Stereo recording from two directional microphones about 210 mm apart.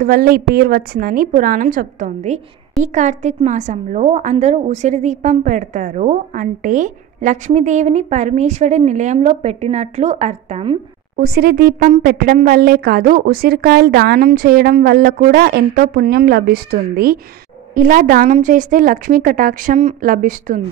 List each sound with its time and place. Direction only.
0.0 s a woman's voice: 45° right (ahead or behind)
11.1 s a woman's voice: 45° right (ahead or behind)